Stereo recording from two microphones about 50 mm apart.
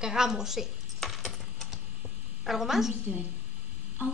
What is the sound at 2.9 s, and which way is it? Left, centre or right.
Speech, right.